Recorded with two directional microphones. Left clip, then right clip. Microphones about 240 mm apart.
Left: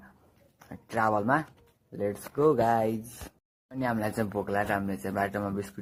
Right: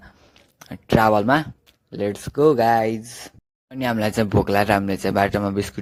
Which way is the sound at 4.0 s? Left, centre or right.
Right.